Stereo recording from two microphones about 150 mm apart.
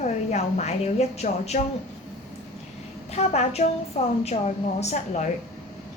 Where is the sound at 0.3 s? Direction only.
50° left (ahead or behind).